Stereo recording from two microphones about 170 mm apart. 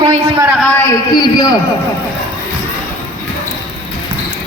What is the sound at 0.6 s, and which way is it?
Speech, 10° left (ahead or behind).